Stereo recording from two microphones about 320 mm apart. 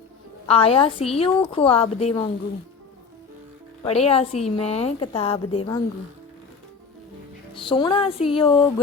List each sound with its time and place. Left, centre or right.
0.4 s a woman's voice: centre
3.8 s a woman's voice: centre
7.5 s a woman's voice: centre